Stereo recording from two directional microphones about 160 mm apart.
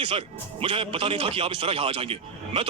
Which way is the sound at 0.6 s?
35° right (ahead or behind).